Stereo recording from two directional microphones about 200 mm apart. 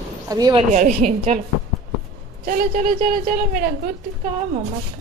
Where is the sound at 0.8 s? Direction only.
35° right (ahead or behind).